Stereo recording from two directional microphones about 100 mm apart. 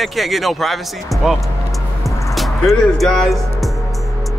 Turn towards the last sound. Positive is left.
turn(degrees=0)  # may be behind; listen again after turning